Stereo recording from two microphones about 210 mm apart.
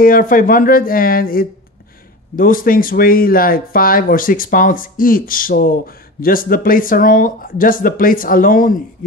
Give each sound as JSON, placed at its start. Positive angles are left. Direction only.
{"t": 0.0, "sound": "speech", "side_deg": 40}